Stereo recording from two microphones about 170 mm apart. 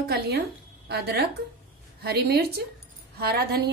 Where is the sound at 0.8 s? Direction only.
70° right (ahead or behind).